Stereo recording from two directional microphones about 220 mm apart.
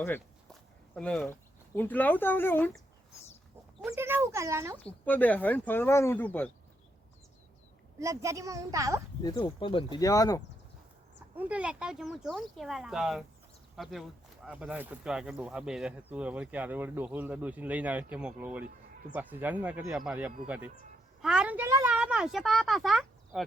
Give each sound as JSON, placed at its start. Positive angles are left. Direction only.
{"t": 0.9, "sound": "speech", "side_deg": 5}
{"t": 3.9, "sound": "speech", "side_deg": -10}
{"t": 4.8, "sound": "speech", "side_deg": 5}
{"t": 7.9, "sound": "speech", "side_deg": -15}
{"t": 9.2, "sound": "speech", "side_deg": 25}
{"t": 11.3, "sound": "a woman's voice", "side_deg": -5}